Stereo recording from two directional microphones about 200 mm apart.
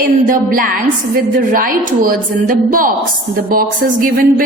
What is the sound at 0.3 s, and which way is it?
A woman's voice, 45° right (ahead or behind).